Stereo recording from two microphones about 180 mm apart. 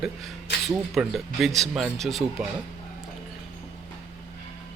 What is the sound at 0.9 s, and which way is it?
Speech, centre (ahead or behind).